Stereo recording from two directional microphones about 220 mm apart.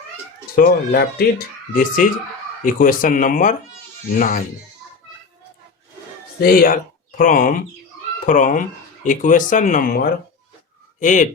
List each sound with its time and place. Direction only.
0.5 s speech: 45° left (ahead or behind)
6.4 s speech: 40° left (ahead or behind)